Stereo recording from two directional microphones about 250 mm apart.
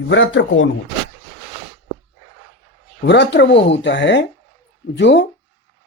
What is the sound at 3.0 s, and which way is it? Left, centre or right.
Speech, left.